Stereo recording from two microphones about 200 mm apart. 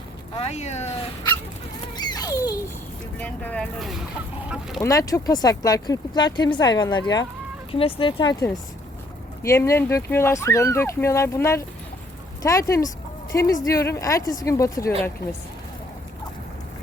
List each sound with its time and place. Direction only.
0.3 s speech: 30° left (ahead or behind)
2.0 s a sound: 20° left (ahead or behind)
3.2 s speech: 10° left (ahead or behind)
4.8 s speech: 15° left (ahead or behind)